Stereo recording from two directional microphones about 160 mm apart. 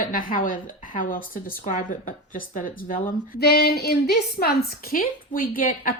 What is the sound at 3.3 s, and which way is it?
A woman's voice, 80° left.